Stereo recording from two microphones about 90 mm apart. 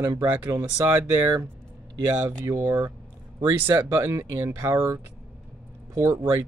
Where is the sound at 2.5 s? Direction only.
30° right (ahead or behind).